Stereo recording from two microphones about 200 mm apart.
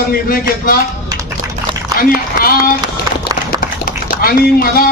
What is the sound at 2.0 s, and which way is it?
Speech, 45° left (ahead or behind).